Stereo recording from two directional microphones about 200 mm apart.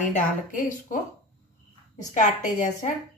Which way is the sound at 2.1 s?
40° left (ahead or behind).